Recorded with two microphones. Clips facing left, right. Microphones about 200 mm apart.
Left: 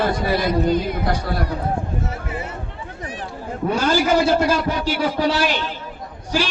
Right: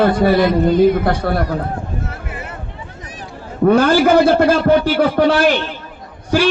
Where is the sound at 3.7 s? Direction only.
55° right (ahead or behind).